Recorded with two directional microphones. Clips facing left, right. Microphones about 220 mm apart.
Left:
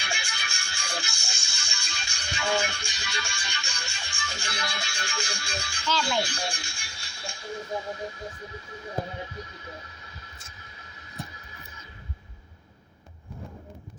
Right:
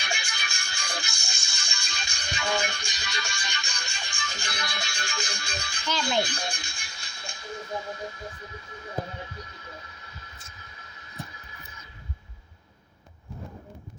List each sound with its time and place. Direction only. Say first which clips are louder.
0.0 s music: right 1 dB; 15° right (ahead or behind)